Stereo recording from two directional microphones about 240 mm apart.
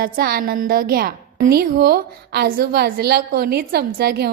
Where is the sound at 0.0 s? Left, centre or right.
Right.